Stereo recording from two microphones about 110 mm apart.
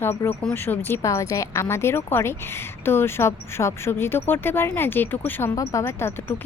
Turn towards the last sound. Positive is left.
turn(degrees=25)  # may be behind; listen again after turning